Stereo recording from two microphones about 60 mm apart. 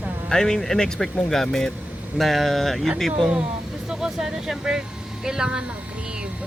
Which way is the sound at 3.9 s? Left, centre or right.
Centre.